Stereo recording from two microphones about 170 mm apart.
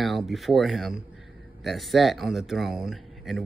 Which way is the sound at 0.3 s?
Centre (ahead or behind).